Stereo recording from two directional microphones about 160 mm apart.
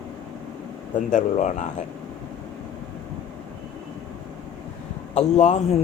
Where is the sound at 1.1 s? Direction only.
50° left (ahead or behind).